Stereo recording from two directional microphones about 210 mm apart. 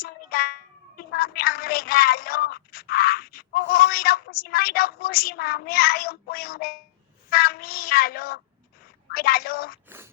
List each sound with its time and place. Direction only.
0.0 s meow: 45° left (ahead or behind)
7.3 s child singing: 45° left (ahead or behind)
9.0 s a woman's voice: 45° left (ahead or behind)